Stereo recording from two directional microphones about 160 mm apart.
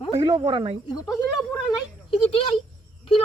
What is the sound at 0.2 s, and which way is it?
Speech, 35° right (ahead or behind).